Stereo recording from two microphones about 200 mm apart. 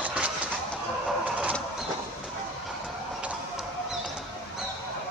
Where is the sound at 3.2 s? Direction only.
5° right (ahead or behind).